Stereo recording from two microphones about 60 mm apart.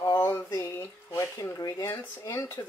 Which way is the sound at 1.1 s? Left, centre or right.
Left.